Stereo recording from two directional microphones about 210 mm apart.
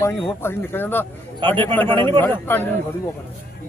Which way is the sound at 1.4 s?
25° right (ahead or behind).